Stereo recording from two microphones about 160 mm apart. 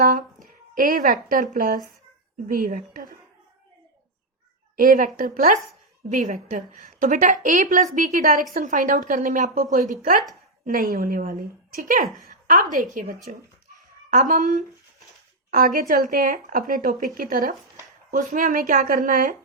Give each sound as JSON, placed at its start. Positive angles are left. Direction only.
{"t": 0.0, "sound": "a woman's voice", "side_deg": -60}
{"t": 4.8, "sound": "a woman's voice", "side_deg": -60}
{"t": 12.0, "sound": "a woman's voice", "side_deg": 0}
{"t": 12.7, "sound": "speech", "side_deg": -55}
{"t": 13.3, "sound": "speech", "side_deg": -40}
{"t": 14.1, "sound": "a woman's voice", "side_deg": -55}